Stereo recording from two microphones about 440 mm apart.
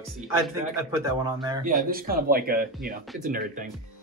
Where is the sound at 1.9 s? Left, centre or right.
Centre.